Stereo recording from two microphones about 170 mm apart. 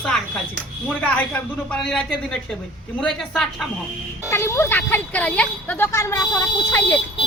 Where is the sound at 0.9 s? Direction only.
10° left (ahead or behind).